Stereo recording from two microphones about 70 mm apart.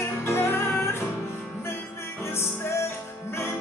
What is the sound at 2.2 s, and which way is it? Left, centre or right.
Music, left.